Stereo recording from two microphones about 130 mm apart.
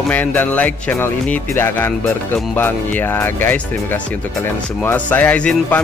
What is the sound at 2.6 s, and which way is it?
Speech, 15° left (ahead or behind).